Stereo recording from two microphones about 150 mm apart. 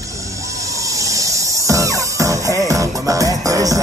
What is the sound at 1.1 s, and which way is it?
Music, 20° right (ahead or behind).